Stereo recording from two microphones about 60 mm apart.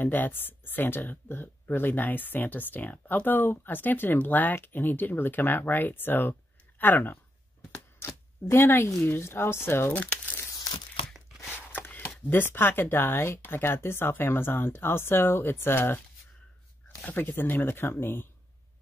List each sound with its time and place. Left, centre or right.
0.0 s speech: left
8.0 s speech: left
9.8 s speech: left
11.5 s a sound: left
13.4 s speech: left
17.0 s speech: left